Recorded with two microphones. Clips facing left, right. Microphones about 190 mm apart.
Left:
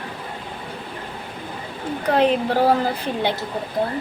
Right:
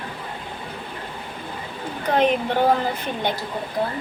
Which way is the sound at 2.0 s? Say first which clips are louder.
Left 1 dB; 35° left (ahead or behind).